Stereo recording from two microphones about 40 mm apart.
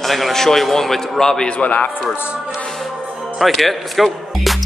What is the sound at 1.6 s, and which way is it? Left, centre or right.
Speech, left.